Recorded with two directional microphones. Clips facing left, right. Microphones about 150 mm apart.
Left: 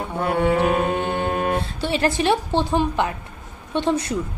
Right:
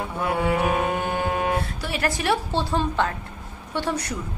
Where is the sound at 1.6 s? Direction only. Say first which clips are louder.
Left 5 dB; 25° left (ahead or behind).